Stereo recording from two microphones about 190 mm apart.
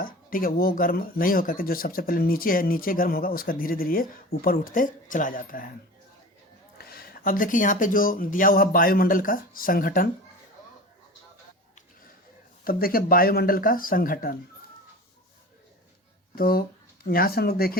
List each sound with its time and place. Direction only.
0.0 s speech: 50° left (ahead or behind)
6.7 s speech: 55° left (ahead or behind)
12.6 s speech: 50° left (ahead or behind)
16.3 s speech: 50° left (ahead or behind)